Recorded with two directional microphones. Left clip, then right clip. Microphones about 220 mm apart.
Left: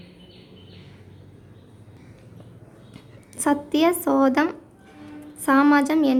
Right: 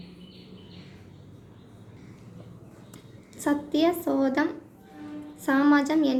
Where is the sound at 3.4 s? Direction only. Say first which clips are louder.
Left 4 dB; 30° left (ahead or behind).